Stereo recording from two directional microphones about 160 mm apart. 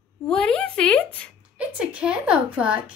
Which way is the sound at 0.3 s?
5° left (ahead or behind).